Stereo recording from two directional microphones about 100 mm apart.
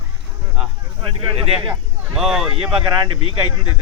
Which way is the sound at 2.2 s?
5° right (ahead or behind).